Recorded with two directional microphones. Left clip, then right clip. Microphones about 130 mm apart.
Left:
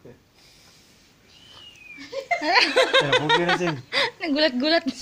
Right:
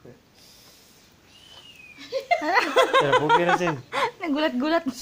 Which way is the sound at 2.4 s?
Centre (ahead or behind).